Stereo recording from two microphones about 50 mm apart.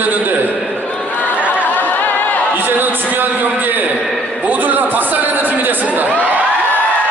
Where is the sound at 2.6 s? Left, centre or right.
Right.